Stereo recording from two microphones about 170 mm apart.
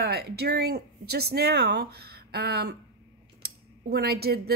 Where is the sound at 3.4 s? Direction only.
70° right (ahead or behind).